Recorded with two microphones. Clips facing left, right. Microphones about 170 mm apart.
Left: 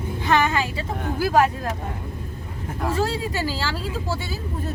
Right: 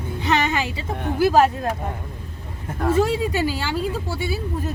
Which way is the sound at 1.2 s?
25° right (ahead or behind).